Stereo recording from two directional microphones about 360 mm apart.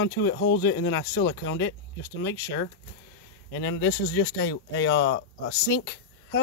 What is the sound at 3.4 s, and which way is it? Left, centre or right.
Speech, left.